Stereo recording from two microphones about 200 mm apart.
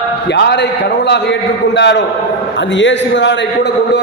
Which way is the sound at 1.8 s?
60° left (ahead or behind).